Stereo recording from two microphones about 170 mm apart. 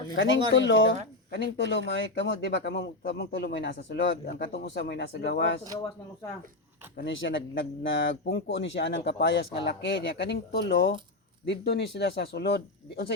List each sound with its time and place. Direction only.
0.2 s speech: 90° left
6.9 s speech: 90° left